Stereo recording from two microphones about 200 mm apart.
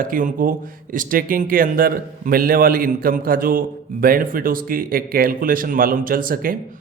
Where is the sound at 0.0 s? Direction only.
45° right (ahead or behind).